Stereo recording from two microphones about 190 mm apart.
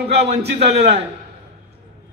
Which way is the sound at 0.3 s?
35° right (ahead or behind).